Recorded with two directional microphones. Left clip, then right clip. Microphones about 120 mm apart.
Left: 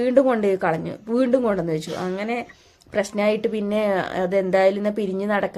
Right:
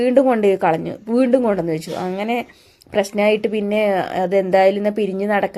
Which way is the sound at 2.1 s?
40° right (ahead or behind).